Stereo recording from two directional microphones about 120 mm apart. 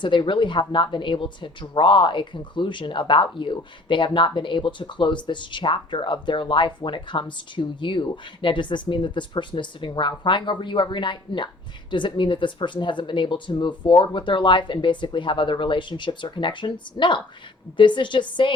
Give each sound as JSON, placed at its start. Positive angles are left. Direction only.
{"t": 0.0, "sound": "a woman's voice", "side_deg": 45}